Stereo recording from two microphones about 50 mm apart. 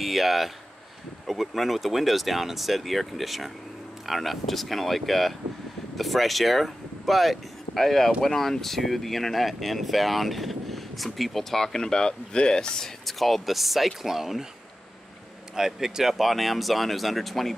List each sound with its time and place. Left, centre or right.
0.0 s speech: centre
13.0 s speech: centre
15.5 s speech: centre